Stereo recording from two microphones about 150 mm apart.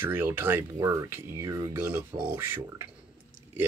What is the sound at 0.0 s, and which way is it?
Speech, 15° right (ahead or behind).